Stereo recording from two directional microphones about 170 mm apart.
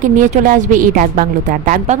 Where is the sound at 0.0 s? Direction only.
50° right (ahead or behind).